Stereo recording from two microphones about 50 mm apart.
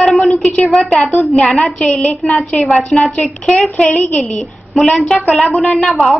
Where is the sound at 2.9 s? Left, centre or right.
Centre.